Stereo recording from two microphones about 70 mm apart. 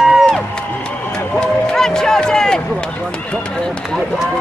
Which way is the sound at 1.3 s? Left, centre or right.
Centre.